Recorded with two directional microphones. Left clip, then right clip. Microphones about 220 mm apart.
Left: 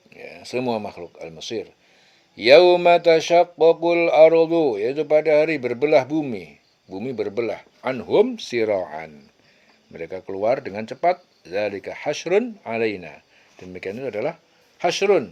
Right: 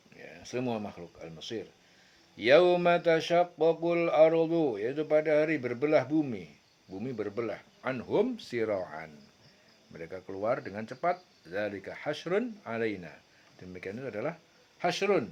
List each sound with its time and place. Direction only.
0.1 s speech: 35° left (ahead or behind)